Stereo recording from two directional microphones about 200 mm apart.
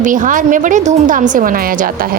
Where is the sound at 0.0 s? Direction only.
40° right (ahead or behind).